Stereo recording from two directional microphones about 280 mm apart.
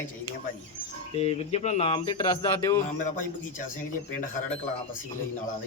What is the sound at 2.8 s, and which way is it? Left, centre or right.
Speech, left.